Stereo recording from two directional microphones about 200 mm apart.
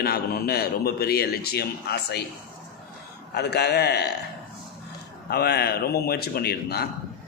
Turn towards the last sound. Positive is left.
turn(degrees=55)  # may be behind; listen again after turning